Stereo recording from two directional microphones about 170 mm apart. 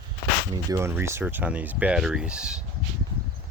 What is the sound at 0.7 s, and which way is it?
Speech, 15° right (ahead or behind).